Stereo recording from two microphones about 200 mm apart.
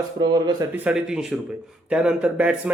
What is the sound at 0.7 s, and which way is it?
Speech, 5° right (ahead or behind).